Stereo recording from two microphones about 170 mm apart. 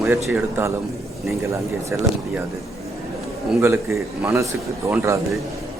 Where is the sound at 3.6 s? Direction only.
15° right (ahead or behind).